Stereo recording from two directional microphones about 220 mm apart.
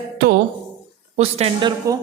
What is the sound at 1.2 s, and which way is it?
Speech, 25° right (ahead or behind).